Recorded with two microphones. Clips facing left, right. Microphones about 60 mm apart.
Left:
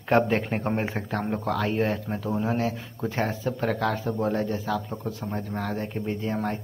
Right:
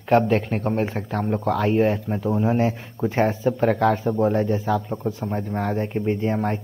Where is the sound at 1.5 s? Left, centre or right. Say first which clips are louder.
Right 7 dB; centre.